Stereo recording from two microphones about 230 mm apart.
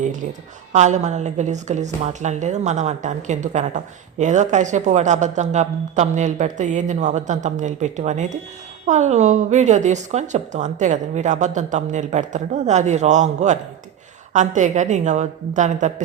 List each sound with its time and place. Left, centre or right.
0.7 s a woman's voice: right